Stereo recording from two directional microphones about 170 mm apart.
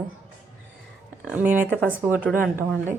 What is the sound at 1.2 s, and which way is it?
Speech, 10° right (ahead or behind).